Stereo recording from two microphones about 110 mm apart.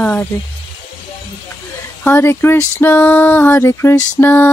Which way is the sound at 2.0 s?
20° left (ahead or behind).